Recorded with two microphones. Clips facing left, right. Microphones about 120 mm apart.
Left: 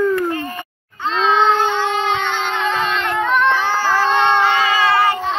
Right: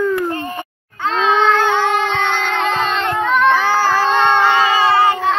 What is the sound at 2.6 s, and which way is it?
Child singing, 30° right (ahead or behind).